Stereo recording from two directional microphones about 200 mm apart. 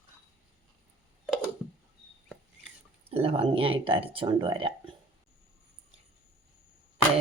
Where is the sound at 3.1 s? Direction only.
30° right (ahead or behind).